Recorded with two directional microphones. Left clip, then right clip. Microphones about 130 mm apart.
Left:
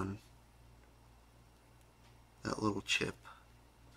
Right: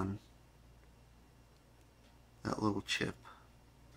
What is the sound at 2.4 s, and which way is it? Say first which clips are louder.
Speech: even; 15° right (ahead or behind).